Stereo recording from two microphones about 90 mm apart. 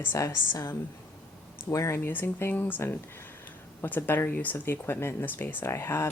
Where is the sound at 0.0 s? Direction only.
30° left (ahead or behind).